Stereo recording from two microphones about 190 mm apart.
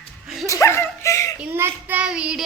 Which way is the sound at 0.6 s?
15° left (ahead or behind).